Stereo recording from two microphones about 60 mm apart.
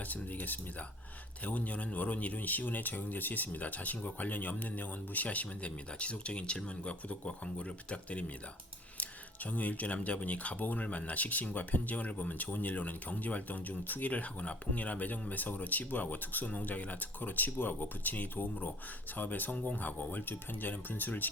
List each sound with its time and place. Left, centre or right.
0.0 s speech: left